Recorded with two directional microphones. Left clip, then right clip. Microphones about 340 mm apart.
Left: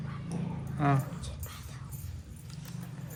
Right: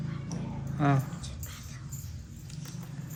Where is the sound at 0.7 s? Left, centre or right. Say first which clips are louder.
Right 1 dB; centre.